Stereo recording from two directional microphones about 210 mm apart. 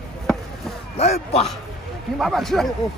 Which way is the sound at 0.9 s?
30° left (ahead or behind).